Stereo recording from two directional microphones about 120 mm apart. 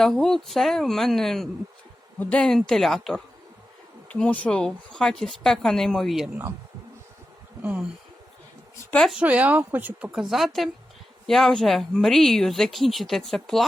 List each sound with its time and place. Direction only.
0.0 s speech: 5° left (ahead or behind)
7.6 s speech: 10° right (ahead or behind)
9.0 s speech: centre (ahead or behind)
9.2 s speech: 10° right (ahead or behind)
10.1 s speech: 5° right (ahead or behind)